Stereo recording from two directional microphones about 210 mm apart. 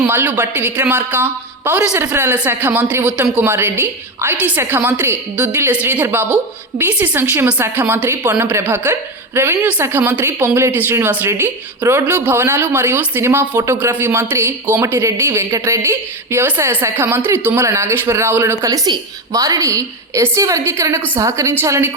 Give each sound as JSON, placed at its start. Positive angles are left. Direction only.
{"t": 0.0, "sound": "a woman's voice", "side_deg": -10}